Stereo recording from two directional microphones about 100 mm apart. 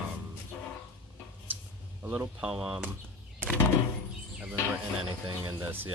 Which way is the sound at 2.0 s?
20° right (ahead or behind).